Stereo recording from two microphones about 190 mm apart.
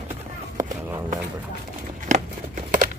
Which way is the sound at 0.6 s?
40° right (ahead or behind).